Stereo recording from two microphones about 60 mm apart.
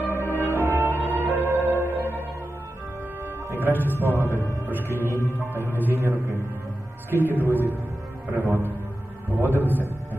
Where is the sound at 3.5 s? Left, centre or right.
Right.